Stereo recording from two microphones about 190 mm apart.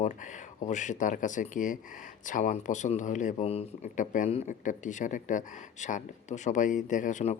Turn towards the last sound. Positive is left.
turn(degrees=40)  # may be behind; listen again after turning